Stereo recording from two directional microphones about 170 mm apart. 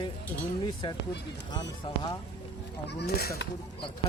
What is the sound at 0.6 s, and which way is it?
A man's voice, 25° left (ahead or behind).